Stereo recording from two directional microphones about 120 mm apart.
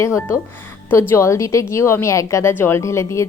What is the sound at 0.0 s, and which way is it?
A woman's voice, 25° left (ahead or behind).